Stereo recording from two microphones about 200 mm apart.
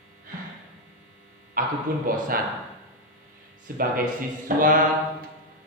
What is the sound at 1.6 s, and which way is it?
Speech, 45° right (ahead or behind).